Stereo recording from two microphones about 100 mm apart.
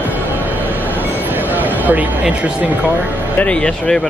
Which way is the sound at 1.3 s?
20° right (ahead or behind).